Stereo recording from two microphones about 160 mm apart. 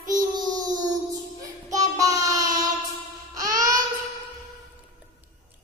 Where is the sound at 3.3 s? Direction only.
20° right (ahead or behind).